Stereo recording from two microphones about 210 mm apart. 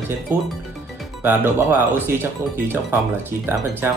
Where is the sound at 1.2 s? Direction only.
10° right (ahead or behind).